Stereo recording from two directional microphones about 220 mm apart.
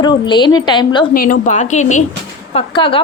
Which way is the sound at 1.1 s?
40° left (ahead or behind).